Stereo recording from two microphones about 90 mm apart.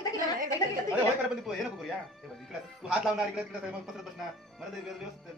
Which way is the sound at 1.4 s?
Centre (ahead or behind).